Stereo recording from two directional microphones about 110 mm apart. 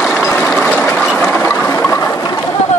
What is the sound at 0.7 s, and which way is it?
Ratchet, 20° left (ahead or behind).